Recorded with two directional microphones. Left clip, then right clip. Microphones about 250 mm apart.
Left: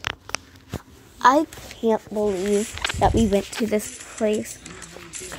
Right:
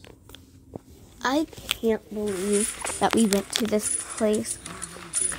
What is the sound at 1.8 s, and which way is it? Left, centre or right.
Speech, centre.